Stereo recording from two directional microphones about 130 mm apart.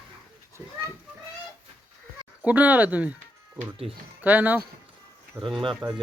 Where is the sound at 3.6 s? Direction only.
45° right (ahead or behind).